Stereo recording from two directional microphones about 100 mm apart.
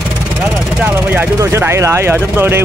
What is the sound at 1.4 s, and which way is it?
Speech, 25° right (ahead or behind).